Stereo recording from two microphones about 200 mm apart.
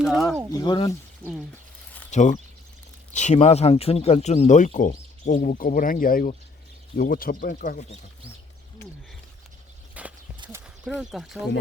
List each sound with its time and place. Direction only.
0.0 s a sound: centre (ahead or behind)
0.6 s speech: 20° left (ahead or behind)
2.0 s speech: 35° left (ahead or behind)
10.0 s horse: 5° right (ahead or behind)
10.8 s speech: centre (ahead or behind)